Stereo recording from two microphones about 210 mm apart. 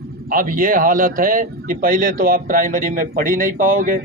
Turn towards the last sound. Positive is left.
turn(degrees=-40)  # may be behind; listen again after turning